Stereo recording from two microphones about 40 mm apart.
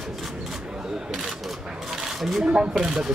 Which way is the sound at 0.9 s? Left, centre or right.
Centre.